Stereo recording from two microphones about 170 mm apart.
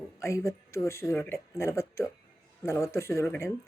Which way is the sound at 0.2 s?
15° left (ahead or behind).